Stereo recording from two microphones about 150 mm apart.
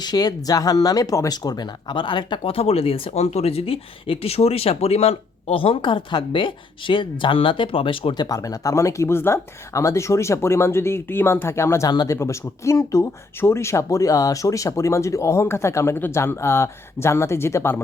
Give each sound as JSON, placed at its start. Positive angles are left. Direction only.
{"t": 0.0, "sound": "speech", "side_deg": 25}